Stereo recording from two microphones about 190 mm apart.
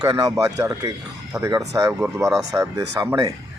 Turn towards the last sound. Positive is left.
turn(degrees=-15)  # may be behind; listen again after turning